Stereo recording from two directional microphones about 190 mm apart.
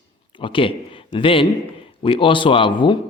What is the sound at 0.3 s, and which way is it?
A man's voice, 25° left (ahead or behind).